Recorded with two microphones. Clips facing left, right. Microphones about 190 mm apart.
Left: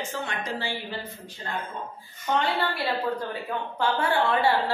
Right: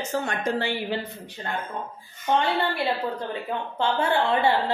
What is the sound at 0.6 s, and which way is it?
Speech, 60° right (ahead or behind).